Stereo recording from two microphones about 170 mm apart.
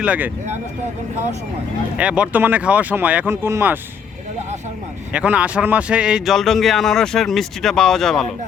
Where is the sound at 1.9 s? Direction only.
5° right (ahead or behind).